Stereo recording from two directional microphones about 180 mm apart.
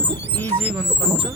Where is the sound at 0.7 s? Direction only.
5° right (ahead or behind).